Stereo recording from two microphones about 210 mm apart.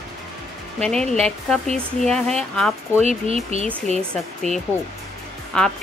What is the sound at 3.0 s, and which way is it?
Speech, 30° right (ahead or behind).